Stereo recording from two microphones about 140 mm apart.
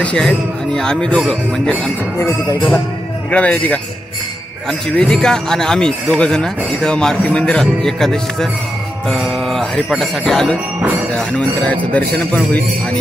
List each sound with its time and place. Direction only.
0.0 s speech: 5° left (ahead or behind)
2.1 s speech: 20° left (ahead or behind)
3.3 s speech: 10° left (ahead or behind)